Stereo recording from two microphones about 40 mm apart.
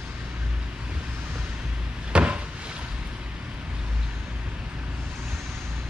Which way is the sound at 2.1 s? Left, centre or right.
Right.